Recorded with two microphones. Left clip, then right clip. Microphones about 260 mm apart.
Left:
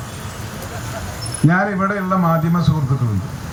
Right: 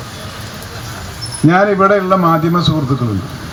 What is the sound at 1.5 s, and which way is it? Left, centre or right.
Speech, right.